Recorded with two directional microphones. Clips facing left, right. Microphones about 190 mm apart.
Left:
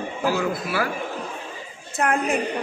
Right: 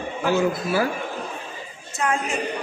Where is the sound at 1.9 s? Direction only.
60° left (ahead or behind).